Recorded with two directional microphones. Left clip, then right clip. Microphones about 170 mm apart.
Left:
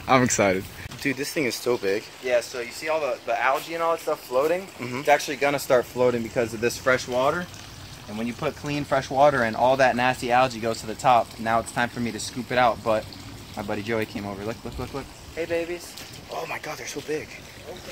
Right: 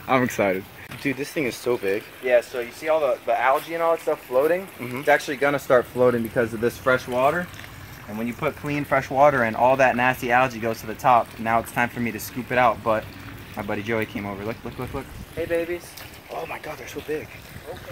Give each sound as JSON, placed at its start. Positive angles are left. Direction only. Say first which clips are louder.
{"t": 0.0, "sound": "speech", "louder": "left 1 dB", "side_deg": 5}
{"t": 2.2, "sound": "speech", "louder": "right 5 dB", "side_deg": -30}
{"t": 3.0, "sound": "speech", "louder": "right 2 dB", "side_deg": -20}
{"t": 4.7, "sound": "speech", "louder": "even", "side_deg": 0}
{"t": 5.2, "sound": "speech", "louder": "right 1 dB", "side_deg": -20}
{"t": 8.2, "sound": "speech", "louder": "right 2 dB", "side_deg": 0}
{"t": 16.3, "sound": "speech", "louder": "even", "side_deg": 0}